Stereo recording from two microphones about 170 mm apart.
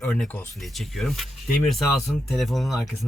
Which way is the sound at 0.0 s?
5° left (ahead or behind).